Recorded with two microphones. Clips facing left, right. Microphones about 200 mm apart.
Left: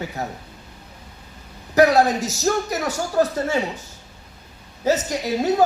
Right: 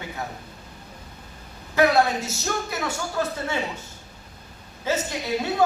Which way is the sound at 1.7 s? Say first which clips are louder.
Left 4 dB; 40° left (ahead or behind).